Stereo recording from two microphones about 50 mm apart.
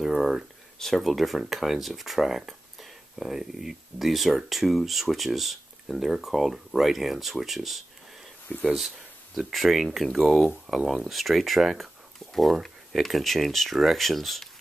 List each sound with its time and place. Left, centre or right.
0.0 s speech: centre
0.7 s speech: centre
9.5 s speech: centre